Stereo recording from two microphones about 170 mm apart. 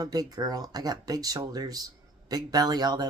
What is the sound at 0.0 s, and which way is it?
Speech, 20° right (ahead or behind).